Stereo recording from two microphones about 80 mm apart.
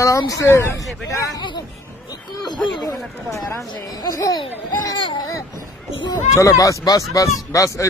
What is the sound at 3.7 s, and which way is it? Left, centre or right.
Speech, left.